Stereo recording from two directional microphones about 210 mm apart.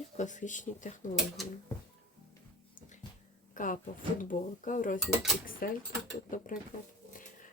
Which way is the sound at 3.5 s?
40° left (ahead or behind).